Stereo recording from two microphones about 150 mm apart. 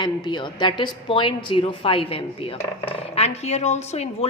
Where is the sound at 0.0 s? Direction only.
30° left (ahead or behind).